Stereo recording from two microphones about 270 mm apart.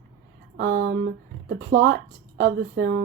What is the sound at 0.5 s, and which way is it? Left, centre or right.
Speech, right.